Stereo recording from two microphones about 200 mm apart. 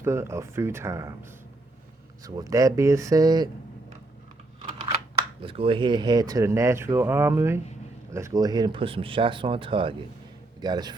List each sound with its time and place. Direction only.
0.0 s speech: 15° right (ahead or behind)
2.2 s speech: 15° right (ahead or behind)
5.4 s speech: 25° right (ahead or behind)